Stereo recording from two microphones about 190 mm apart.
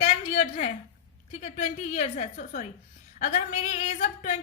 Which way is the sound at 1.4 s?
40° left (ahead or behind).